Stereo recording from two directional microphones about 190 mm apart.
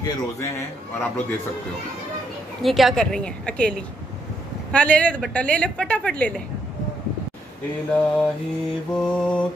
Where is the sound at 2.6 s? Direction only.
Centre (ahead or behind).